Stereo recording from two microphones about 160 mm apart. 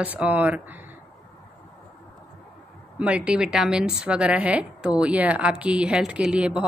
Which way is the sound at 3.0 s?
5° right (ahead or behind).